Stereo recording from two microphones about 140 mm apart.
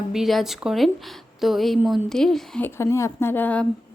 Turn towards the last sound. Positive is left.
turn(degrees=15)  # may be behind; listen again after turning